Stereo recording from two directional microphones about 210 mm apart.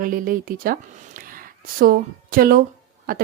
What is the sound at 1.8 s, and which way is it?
Speech, 45° right (ahead or behind).